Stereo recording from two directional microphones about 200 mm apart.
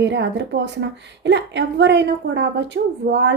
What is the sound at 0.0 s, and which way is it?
A woman's voice, 60° right (ahead or behind).